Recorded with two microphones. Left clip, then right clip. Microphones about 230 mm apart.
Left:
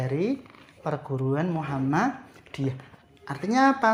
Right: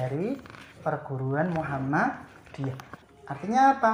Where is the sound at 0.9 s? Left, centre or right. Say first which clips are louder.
Left 1 dB; left.